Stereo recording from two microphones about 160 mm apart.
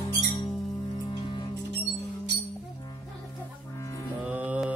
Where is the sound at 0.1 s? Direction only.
20° left (ahead or behind).